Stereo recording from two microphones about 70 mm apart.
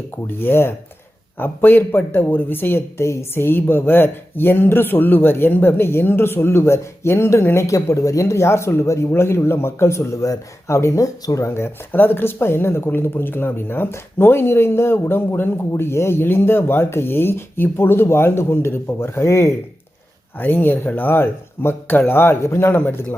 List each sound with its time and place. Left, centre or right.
0.3 s speech: left
20.4 s speech: left